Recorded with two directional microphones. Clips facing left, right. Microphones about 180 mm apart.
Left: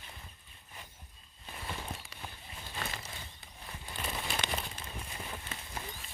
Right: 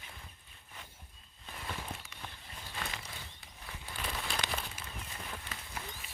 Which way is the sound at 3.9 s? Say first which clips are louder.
Left 1 dB; 10° left (ahead or behind).